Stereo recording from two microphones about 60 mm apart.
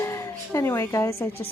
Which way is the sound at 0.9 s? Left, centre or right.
Left.